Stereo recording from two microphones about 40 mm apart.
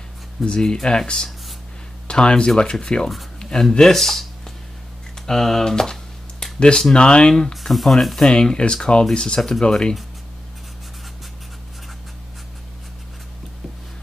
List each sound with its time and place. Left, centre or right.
0.5 s speech: centre
3.3 s a sound: centre
3.7 s speech: centre
6.4 s a sound: centre
6.9 s speech: left
7.6 s speech: centre
8.2 s speech: centre